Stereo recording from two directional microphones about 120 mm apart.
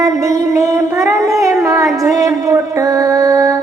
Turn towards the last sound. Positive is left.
turn(degrees=-30)  # may be behind; listen again after turning